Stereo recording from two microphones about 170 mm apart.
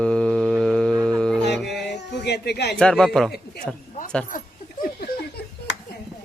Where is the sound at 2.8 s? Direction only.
5° left (ahead or behind).